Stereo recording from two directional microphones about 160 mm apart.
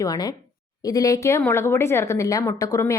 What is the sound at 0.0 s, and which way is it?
Speech, 25° left (ahead or behind).